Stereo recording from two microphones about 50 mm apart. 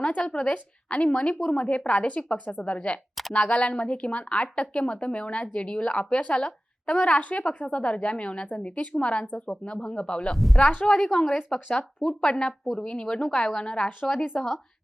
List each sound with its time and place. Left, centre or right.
0.2 s a woman's voice: centre
0.5 s speech: left
10.3 s a woman's voice: centre